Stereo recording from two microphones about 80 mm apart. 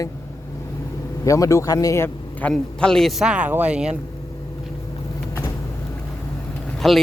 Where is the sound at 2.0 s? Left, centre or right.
Centre.